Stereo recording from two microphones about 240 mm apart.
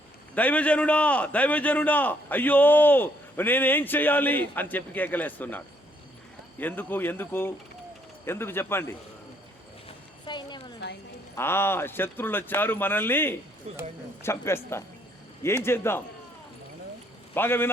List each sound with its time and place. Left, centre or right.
0.3 s a man's voice: centre
10.2 s a sound: centre
11.3 s a man's voice: centre
13.7 s speech: right
14.2 s a man's voice: centre
17.3 s a man's voice: centre